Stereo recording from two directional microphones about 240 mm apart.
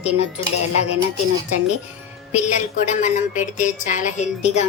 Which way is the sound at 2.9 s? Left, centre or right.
Left.